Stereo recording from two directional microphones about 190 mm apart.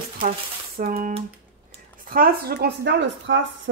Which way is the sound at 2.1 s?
50° right (ahead or behind).